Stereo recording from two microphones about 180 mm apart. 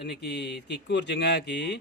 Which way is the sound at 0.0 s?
70° left (ahead or behind).